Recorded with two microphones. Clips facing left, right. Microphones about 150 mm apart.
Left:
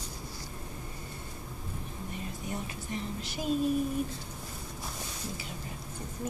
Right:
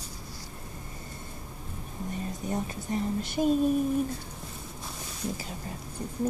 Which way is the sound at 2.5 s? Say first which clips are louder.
Right 7 dB; 35° right (ahead or behind).